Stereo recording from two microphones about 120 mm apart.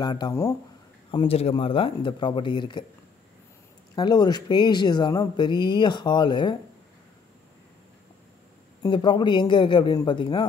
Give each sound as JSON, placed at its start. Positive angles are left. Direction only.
{"t": 0.0, "sound": "speech", "side_deg": 35}
{"t": 1.1, "sound": "speech", "side_deg": 55}
{"t": 3.9, "sound": "speech", "side_deg": 35}
{"t": 8.8, "sound": "speech", "side_deg": 35}